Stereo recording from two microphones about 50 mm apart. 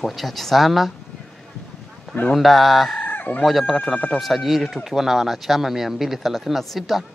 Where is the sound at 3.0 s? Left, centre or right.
Left.